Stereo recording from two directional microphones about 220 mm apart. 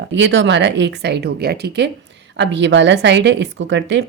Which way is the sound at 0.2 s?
50° right (ahead or behind).